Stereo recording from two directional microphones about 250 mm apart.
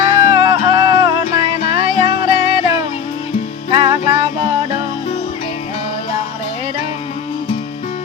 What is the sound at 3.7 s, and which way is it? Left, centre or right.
Music, centre.